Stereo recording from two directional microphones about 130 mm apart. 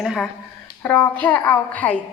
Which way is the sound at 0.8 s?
10° left (ahead or behind).